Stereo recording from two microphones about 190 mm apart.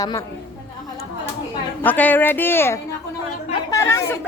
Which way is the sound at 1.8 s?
10° left (ahead or behind).